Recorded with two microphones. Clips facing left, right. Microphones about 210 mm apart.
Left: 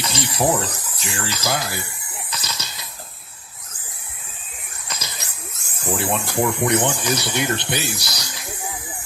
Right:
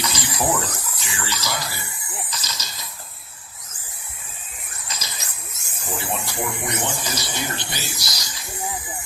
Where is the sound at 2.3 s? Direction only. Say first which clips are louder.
Left 2 dB; 60° left (ahead or behind).